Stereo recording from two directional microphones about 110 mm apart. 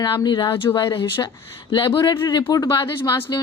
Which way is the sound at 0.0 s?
40° left (ahead or behind).